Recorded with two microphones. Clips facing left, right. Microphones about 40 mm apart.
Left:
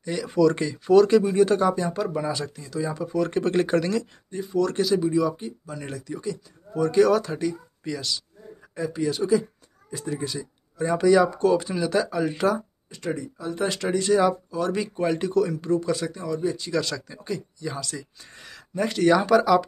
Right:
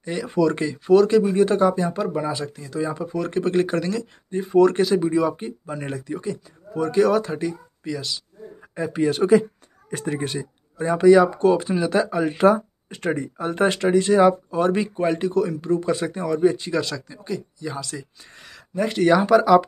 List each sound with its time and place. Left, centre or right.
0.0 s speech: centre
4.6 s speech: right
6.9 s speech: centre
8.9 s speech: right
10.8 s speech: centre
12.9 s speech: right
13.7 s speech: centre
14.5 s speech: right
14.8 s speech: centre
15.8 s speech: right
16.2 s speech: right
16.7 s speech: centre